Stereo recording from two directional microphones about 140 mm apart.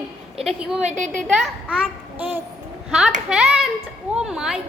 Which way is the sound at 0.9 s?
65° right (ahead or behind).